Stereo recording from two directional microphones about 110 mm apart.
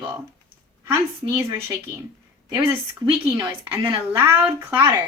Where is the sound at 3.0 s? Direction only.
35° right (ahead or behind).